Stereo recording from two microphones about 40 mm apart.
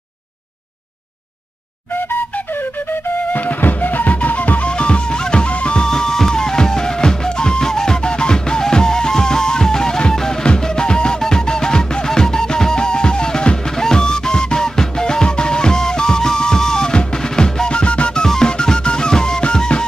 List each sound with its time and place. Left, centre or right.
2.0 s flute: left
3.3 s music: left
5.8 s music: centre
17.7 s music: left
18.2 s music: centre